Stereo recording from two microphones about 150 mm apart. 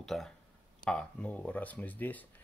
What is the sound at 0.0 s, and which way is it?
Speech, centre (ahead or behind).